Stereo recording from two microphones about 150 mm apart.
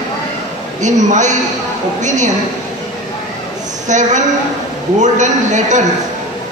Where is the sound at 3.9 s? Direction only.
55° right (ahead or behind).